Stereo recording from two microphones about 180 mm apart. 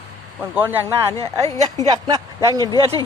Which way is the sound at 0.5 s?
10° right (ahead or behind).